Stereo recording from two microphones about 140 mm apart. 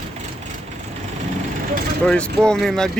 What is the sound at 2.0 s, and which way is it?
Speech, 5° left (ahead or behind).